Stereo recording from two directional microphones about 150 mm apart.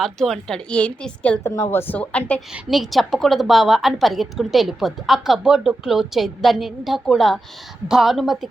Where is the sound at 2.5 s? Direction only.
Centre (ahead or behind).